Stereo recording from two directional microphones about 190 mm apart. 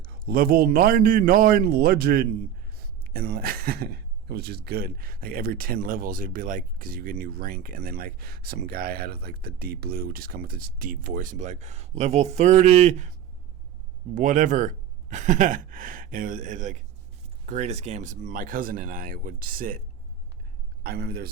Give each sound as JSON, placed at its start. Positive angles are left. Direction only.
{"t": 0.0, "sound": "a man's voice", "side_deg": -50}
{"t": 14.2, "sound": "a man's voice", "side_deg": -40}
{"t": 20.8, "sound": "speech", "side_deg": -55}